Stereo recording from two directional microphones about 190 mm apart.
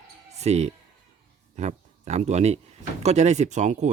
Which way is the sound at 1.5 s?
35° right (ahead or behind).